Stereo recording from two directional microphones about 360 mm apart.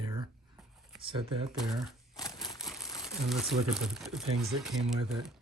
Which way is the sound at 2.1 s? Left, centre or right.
Centre.